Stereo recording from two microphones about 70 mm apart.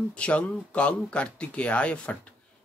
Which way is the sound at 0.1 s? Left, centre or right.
Centre.